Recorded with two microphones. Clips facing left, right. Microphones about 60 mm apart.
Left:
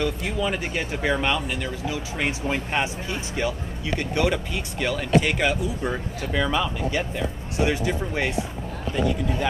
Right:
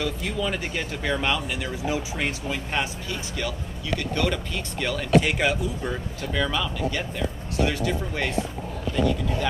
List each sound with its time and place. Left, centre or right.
0.0 s speech: centre
1.2 s speech: centre
2.7 s speech: left; by 5.6 s centre
5.8 s speech: centre